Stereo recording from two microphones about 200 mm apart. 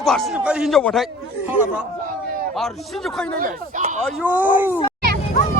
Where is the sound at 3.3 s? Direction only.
45° right (ahead or behind).